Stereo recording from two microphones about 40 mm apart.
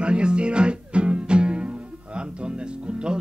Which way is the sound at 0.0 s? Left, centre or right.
Right.